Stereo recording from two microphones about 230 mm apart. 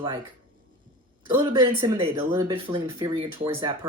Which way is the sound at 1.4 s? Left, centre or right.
Right.